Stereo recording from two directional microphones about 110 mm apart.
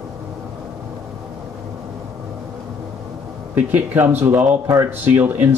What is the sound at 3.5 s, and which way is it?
Speech, 15° right (ahead or behind).